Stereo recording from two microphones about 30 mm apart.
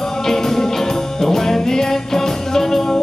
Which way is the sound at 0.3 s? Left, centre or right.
Centre.